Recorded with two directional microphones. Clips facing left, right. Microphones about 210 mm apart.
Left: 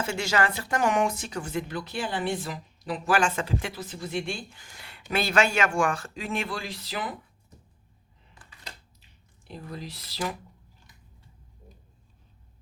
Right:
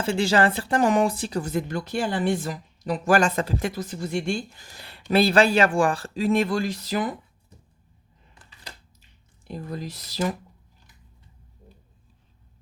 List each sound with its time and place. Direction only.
0.0 s speech: 30° right (ahead or behind)
9.5 s speech: 45° right (ahead or behind)